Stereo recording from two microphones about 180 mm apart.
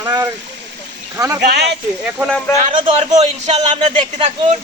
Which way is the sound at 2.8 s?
30° right (ahead or behind).